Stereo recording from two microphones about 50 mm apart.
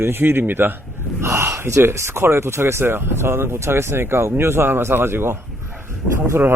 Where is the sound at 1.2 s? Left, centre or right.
Right.